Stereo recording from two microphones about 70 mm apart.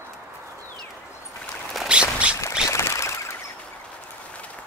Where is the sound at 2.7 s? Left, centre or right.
Left.